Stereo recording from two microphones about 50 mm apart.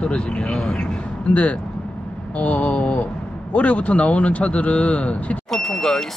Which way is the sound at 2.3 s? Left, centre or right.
Left.